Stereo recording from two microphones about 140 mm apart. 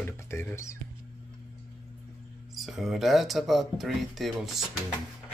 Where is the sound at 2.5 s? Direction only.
Centre (ahead or behind).